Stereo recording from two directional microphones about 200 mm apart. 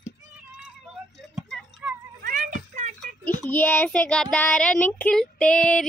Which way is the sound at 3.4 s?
10° left (ahead or behind).